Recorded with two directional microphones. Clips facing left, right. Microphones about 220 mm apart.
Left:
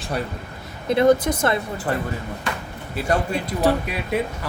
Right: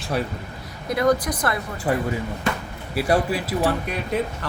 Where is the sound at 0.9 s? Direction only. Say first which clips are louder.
Left 4 dB; 25° left (ahead or behind).